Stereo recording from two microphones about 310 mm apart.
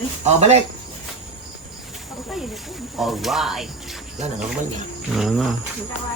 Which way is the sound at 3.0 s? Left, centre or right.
Centre.